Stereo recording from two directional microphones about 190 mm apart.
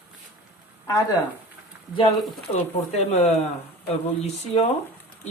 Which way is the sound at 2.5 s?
35° left (ahead or behind).